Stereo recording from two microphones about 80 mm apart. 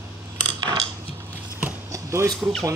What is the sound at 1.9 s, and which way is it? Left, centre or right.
Chopping, right.